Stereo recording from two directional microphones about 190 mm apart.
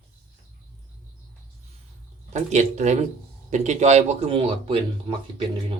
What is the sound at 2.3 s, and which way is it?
Speech, 40° right (ahead or behind).